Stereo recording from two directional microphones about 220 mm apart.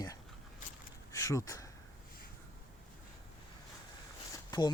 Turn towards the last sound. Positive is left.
turn(degrees=15)  # may be behind; listen again after turning